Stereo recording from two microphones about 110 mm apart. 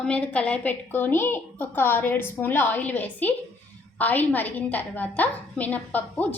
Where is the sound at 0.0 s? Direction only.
10° left (ahead or behind).